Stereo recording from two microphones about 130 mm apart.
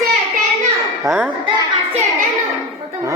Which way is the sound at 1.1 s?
25° right (ahead or behind).